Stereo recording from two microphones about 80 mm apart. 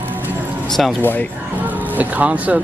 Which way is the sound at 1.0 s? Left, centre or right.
Left.